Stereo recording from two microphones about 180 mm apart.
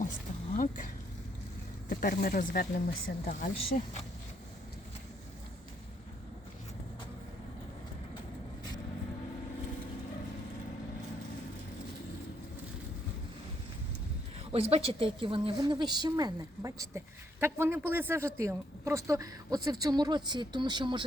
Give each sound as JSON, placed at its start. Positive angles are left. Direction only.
{"t": 0.5, "sound": "speech", "side_deg": 45}
{"t": 1.9, "sound": "speech", "side_deg": 50}
{"t": 14.5, "sound": "a woman's voice", "side_deg": -35}